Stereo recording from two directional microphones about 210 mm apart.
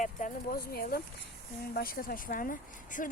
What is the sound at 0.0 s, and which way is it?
Speech, 40° left (ahead or behind).